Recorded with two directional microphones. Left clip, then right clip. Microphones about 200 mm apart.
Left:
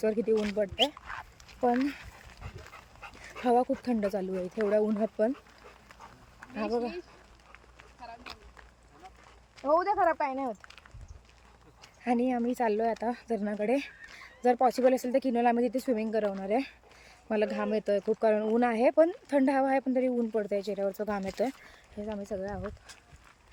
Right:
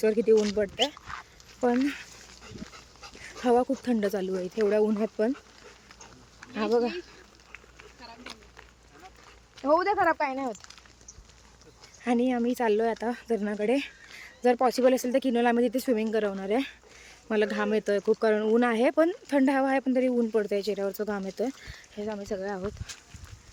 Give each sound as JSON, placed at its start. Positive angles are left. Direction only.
{"t": 0.0, "sound": "speech", "side_deg": 0}
{"t": 1.1, "sound": "speech", "side_deg": 40}
{"t": 1.8, "sound": "speech", "side_deg": 0}
{"t": 2.4, "sound": "pig", "side_deg": 25}
{"t": 3.4, "sound": "speech", "side_deg": 0}
{"t": 6.7, "sound": "speech", "side_deg": -40}
{"t": 9.6, "sound": "speech", "side_deg": -45}
{"t": 12.0, "sound": "speech", "side_deg": 0}
{"t": 21.9, "sound": "speech", "side_deg": -30}
{"t": 22.9, "sound": "speech", "side_deg": 15}